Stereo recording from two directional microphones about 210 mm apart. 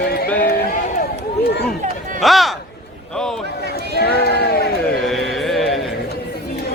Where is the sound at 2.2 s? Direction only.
Centre (ahead or behind).